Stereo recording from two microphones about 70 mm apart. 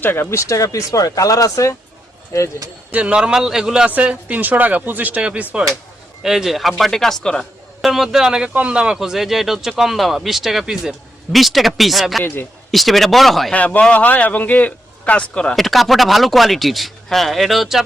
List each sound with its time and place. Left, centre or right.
0.0 s speech: left
2.9 s a man's voice: centre
3.8 s speech: centre
6.2 s speech: centre
7.8 s a man's voice: centre
9.0 s speech: centre
12.2 s speech: left
12.7 s speech: centre
13.5 s speech: centre
15.5 s speech: centre